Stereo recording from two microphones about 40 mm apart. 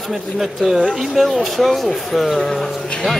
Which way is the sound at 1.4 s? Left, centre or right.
Centre.